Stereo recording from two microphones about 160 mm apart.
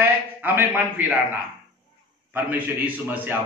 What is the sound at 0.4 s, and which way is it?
A man's voice, 10° right (ahead or behind).